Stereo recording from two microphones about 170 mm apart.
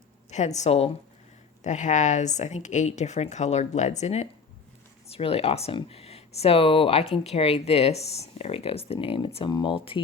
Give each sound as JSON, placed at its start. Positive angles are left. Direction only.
{"t": 0.3, "sound": "speech", "side_deg": 40}